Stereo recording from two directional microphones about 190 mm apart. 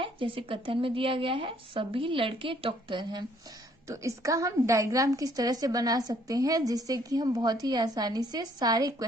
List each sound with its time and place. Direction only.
0.0 s a woman's voice: 25° right (ahead or behind)